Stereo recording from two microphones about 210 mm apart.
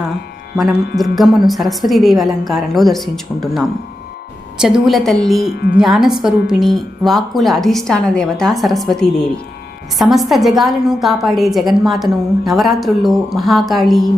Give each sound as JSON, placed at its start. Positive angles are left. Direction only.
{"t": 0.5, "sound": "speech", "side_deg": 0}
{"t": 4.6, "sound": "speech", "side_deg": 0}
{"t": 5.5, "sound": "speech", "side_deg": 50}
{"t": 5.7, "sound": "speech", "side_deg": 0}